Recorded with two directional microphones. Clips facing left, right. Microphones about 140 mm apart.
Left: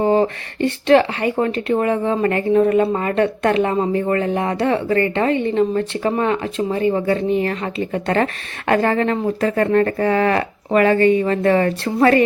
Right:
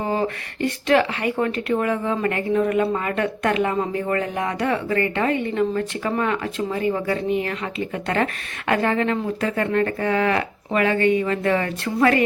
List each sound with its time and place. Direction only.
0.0 s speech: 30° left (ahead or behind)